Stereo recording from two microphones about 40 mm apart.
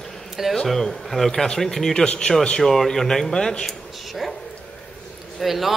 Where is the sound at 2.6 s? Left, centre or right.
Centre.